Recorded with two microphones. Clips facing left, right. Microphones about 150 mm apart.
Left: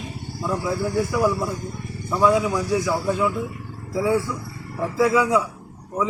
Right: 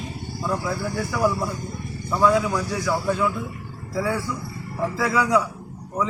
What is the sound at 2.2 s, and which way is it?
Speech, 15° left (ahead or behind).